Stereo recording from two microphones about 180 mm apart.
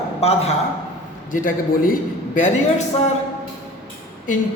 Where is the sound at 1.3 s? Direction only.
50° left (ahead or behind).